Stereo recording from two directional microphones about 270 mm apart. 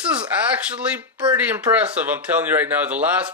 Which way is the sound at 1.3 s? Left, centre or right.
Centre.